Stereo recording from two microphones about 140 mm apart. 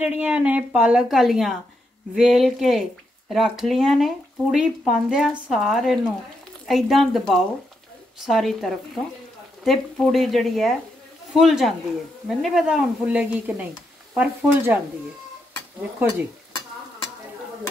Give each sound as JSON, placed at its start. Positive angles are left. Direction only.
{"t": 0.0, "sound": "a woman's voice", "side_deg": -10}